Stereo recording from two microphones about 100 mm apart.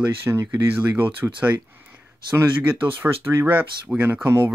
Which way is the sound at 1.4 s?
20° right (ahead or behind).